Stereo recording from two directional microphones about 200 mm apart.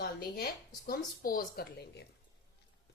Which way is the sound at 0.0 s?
50° left (ahead or behind).